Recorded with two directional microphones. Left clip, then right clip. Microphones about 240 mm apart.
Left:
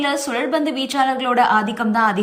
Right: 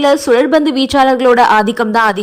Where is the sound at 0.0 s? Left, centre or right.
Centre.